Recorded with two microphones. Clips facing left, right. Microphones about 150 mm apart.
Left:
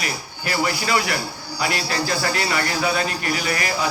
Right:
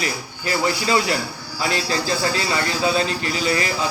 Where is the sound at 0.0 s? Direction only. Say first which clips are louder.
Right 2 dB; 25° right (ahead or behind).